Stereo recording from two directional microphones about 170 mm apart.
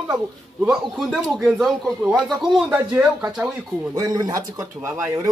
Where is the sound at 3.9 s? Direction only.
20° right (ahead or behind).